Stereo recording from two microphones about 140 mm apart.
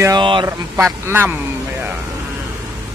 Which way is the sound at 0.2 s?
35° right (ahead or behind).